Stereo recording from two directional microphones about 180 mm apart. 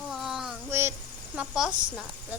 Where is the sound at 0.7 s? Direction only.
15° right (ahead or behind).